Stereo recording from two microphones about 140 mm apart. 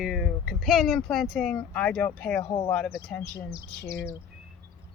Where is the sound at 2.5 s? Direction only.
25° left (ahead or behind).